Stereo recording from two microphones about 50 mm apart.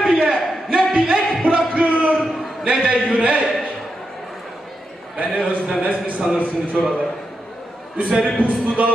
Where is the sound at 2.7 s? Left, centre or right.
Centre.